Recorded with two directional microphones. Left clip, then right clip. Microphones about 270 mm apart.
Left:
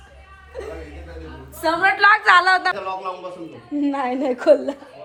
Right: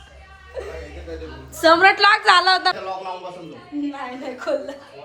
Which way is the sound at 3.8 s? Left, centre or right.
Left.